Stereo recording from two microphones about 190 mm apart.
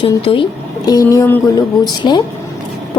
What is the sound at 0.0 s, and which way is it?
A woman's voice, 30° left (ahead or behind).